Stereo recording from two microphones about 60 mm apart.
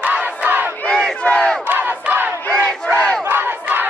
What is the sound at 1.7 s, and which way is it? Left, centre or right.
Battle cry, right.